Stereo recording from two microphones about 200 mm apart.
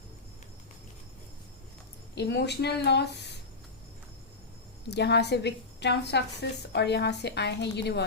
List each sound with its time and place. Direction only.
2.1 s a woman's voice: 55° left (ahead or behind)
4.9 s a woman's voice: 55° left (ahead or behind)